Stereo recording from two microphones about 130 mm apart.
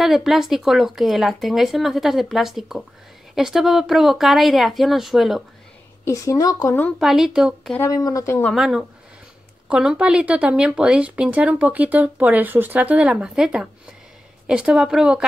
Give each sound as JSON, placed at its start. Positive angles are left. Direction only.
{"t": 0.0, "sound": "speech", "side_deg": 0}
{"t": 6.0, "sound": "a woman's voice", "side_deg": 25}
{"t": 7.0, "sound": "speech", "side_deg": 0}
{"t": 7.9, "sound": "a woman's voice", "side_deg": 25}
{"t": 8.5, "sound": "speech", "side_deg": -5}